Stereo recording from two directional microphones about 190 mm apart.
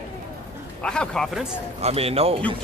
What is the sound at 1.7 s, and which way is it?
Speech, 35° right (ahead or behind).